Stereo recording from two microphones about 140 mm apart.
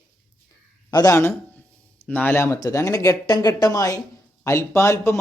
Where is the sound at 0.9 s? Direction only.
25° left (ahead or behind).